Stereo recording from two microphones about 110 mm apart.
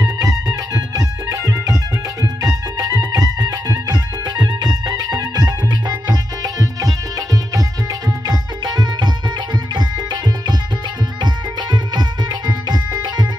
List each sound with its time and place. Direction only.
0.0 s music: 30° right (ahead or behind)